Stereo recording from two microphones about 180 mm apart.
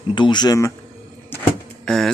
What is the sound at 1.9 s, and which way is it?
Speech, centre (ahead or behind).